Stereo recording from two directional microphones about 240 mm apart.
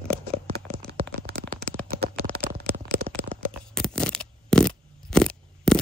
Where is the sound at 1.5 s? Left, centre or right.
Centre.